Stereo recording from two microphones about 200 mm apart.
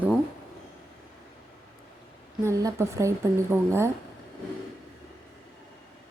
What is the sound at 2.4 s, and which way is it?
A woman's voice, 15° right (ahead or behind).